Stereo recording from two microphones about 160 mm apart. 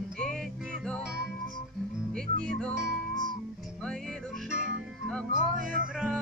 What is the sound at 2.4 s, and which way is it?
Music, 5° left (ahead or behind).